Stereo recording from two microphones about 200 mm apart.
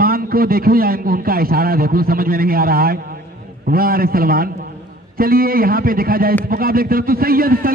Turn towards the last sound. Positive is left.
turn(degrees=-45)  # may be behind; listen again after turning